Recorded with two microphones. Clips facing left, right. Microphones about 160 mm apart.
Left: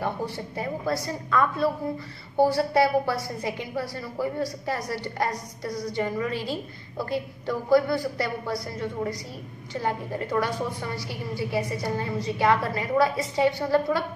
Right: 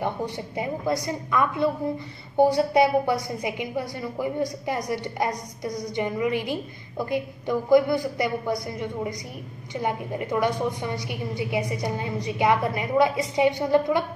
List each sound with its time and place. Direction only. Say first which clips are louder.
0.0 s a woman's voice: right 1 dB; 20° right (ahead or behind)